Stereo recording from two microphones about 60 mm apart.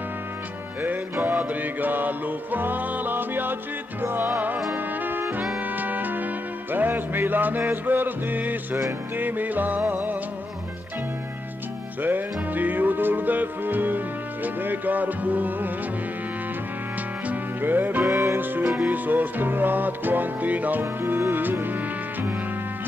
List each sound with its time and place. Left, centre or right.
0.8 s music: right
12.0 s music: right
17.3 s music: right
18.0 s music: right
18.4 s music: right
20.8 s music: right